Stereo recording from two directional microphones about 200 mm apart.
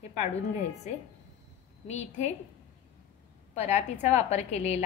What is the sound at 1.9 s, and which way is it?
Speech, 35° left (ahead or behind).